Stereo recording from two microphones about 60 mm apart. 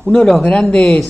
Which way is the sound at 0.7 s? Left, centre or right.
Centre.